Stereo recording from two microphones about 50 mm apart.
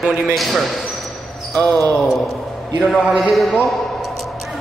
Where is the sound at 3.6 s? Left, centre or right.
Centre.